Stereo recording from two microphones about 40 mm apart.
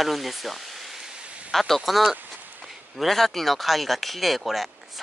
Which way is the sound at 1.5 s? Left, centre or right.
Centre.